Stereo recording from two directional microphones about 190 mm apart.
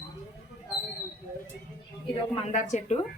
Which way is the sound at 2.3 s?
35° left (ahead or behind).